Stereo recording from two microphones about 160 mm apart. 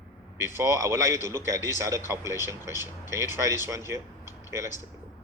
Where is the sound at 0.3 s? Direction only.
15° right (ahead or behind).